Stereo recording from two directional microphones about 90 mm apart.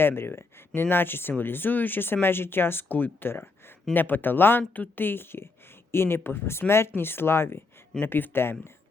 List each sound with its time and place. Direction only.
0.0 s speech: 25° left (ahead or behind)